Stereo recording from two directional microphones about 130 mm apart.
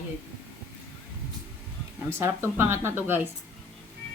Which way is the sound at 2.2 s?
20° right (ahead or behind).